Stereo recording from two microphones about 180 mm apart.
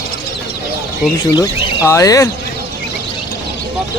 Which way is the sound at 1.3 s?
20° left (ahead or behind).